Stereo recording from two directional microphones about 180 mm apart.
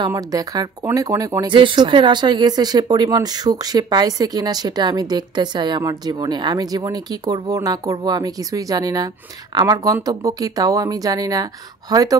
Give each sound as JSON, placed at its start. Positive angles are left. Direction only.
{"t": 0.0, "sound": "speech", "side_deg": -20}